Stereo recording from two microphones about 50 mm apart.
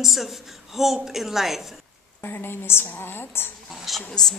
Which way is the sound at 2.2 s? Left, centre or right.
Left.